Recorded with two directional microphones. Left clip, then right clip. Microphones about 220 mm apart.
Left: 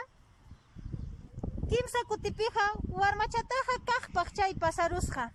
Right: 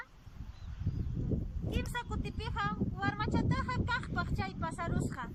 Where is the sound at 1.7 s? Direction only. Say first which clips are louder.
Left 9 dB; 25° left (ahead or behind).